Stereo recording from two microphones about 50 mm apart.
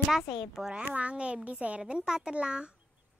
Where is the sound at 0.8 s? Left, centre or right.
Right.